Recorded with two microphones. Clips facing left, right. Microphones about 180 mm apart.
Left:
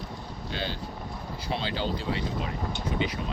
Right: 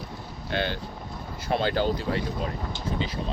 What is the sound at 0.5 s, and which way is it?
Speech, 60° right (ahead or behind).